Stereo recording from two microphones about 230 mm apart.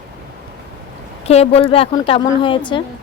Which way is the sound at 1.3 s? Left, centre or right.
Left.